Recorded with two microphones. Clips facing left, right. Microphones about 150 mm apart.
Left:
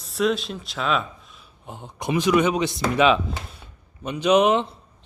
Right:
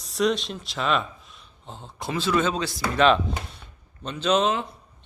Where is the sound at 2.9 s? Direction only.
5° left (ahead or behind).